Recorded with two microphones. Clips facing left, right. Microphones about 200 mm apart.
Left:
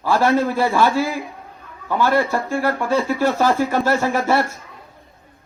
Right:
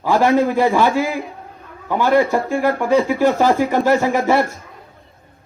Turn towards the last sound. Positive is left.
turn(degrees=-15)  # may be behind; listen again after turning